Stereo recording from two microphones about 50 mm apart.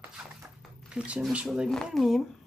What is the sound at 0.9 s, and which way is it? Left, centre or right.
Speech, right.